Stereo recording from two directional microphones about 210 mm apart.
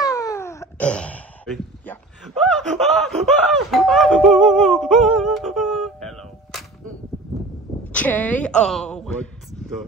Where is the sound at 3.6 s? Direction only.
Centre (ahead or behind).